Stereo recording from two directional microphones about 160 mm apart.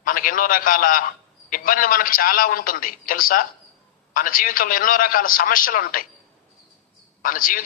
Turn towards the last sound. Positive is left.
turn(degrees=60)  # may be behind; listen again after turning